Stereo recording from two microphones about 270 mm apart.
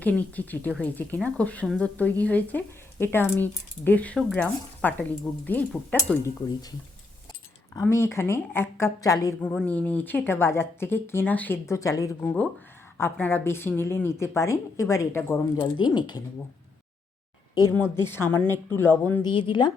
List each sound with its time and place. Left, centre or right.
0.0 s a woman's voice: centre
17.5 s a woman's voice: centre
19.3 s a woman's voice: centre